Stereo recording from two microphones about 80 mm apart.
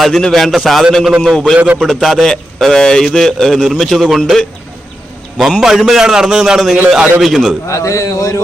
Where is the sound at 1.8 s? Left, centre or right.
Centre.